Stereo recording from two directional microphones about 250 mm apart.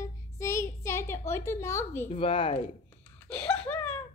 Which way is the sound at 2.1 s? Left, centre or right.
Left.